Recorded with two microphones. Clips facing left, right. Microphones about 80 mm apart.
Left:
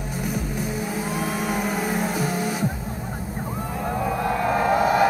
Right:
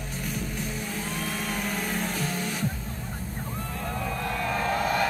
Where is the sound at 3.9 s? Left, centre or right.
Centre.